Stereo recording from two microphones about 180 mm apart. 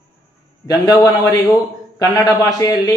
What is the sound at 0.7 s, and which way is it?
Speech, 20° left (ahead or behind).